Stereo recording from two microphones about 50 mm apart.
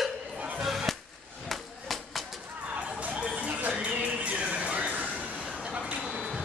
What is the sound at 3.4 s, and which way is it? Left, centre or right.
Music, right.